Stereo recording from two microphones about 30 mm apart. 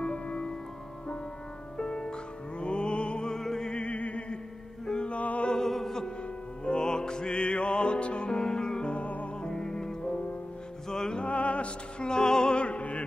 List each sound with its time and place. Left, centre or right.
0.0 s music: left
1.8 s music: left
3.3 s opera: centre
3.7 s music: left
5.6 s music: centre
6.8 s music: left
8.4 s music: left
8.8 s music: left
9.4 s music: left
11.2 s music: left
12.0 s music: left
12.5 s opera: left